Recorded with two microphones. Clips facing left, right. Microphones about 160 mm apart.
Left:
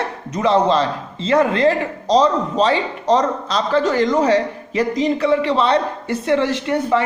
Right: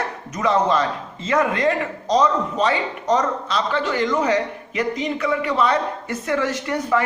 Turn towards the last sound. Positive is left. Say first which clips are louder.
# left 3 dB
turn(degrees=25)  # may be behind; listen again after turning